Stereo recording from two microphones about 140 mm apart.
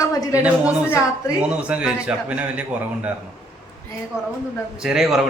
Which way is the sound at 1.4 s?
10° right (ahead or behind).